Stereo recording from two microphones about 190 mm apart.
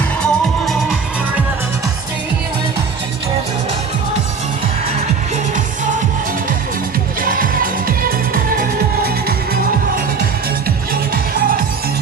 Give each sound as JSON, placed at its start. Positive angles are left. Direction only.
{"t": 0.2, "sound": "music", "side_deg": 0}
{"t": 7.2, "sound": "music", "side_deg": -45}
{"t": 11.1, "sound": "music", "side_deg": -50}